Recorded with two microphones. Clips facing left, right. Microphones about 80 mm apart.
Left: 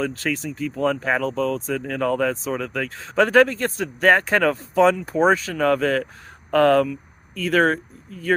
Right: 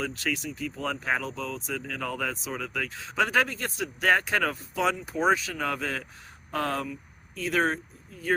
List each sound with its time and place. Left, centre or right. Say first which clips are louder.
0.0 s speech: left 6 dB; left
5.5 s speech: left 11 dB; left